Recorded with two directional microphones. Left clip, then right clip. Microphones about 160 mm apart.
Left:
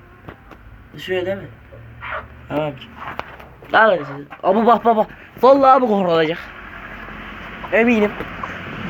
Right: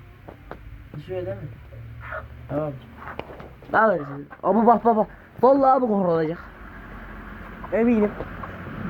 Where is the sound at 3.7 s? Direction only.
10° right (ahead or behind).